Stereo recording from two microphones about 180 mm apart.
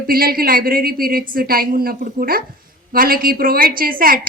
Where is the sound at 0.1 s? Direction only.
55° right (ahead or behind).